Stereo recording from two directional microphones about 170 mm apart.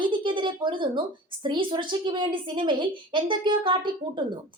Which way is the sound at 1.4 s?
30° right (ahead or behind).